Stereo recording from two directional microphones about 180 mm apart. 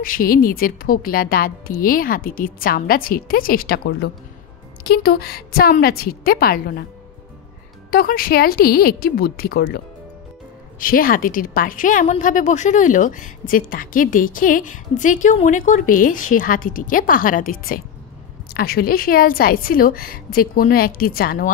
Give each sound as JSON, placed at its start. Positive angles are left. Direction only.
{"t": 0.0, "sound": "a woman's voice", "side_deg": 50}
{"t": 7.9, "sound": "a woman's voice", "side_deg": 55}
{"t": 10.8, "sound": "a woman's voice", "side_deg": 50}